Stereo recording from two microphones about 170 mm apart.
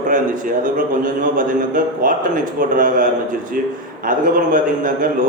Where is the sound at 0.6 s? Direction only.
55° right (ahead or behind).